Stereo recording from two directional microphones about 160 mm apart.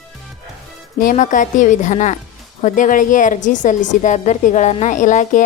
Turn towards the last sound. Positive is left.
turn(degrees=50)  # may be behind; listen again after turning